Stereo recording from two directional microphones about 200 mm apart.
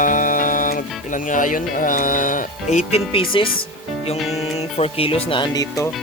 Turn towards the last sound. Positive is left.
turn(degrees=20)  # may be behind; listen again after turning